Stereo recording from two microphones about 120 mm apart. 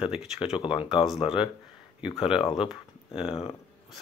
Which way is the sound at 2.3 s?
45° left (ahead or behind).